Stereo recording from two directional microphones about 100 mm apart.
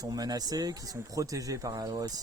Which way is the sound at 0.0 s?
40° right (ahead or behind).